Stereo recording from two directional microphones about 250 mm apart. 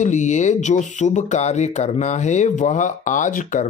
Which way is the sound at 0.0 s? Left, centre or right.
Left.